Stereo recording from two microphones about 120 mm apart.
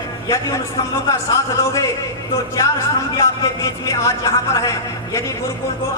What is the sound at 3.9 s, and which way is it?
A man's voice, 25° left (ahead or behind).